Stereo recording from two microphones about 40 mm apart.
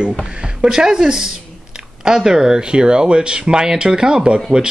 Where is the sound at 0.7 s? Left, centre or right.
Centre.